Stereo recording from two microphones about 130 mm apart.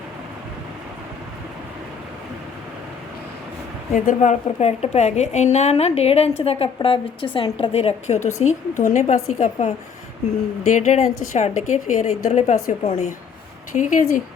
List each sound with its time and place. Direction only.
3.9 s a woman's voice: 75° left (ahead or behind)
13.7 s speech: 85° left